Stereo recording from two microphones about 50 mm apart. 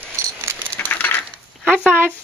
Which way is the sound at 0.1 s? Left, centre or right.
Right.